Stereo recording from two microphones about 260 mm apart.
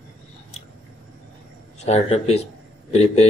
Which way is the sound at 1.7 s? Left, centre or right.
Left.